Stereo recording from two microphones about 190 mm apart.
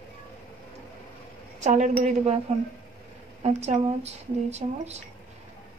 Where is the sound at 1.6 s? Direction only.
40° right (ahead or behind).